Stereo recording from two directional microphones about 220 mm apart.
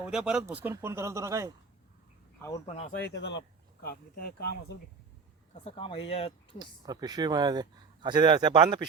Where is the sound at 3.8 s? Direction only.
40° left (ahead or behind).